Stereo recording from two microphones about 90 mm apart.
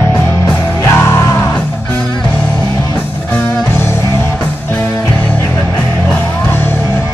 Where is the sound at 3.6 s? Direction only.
30° left (ahead or behind).